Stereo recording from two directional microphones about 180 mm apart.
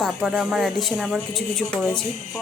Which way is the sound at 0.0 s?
Centre (ahead or behind).